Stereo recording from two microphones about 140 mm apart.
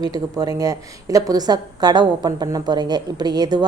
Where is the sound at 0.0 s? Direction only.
30° right (ahead or behind).